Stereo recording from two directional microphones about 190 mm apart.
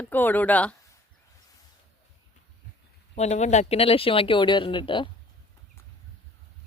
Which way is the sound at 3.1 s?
35° left (ahead or behind).